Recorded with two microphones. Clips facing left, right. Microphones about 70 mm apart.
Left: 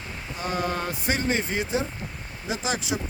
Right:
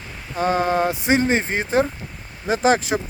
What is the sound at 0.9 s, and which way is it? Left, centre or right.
Speech, right.